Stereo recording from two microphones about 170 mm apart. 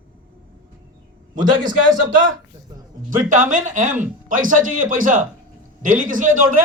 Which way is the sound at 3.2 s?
50° right (ahead or behind).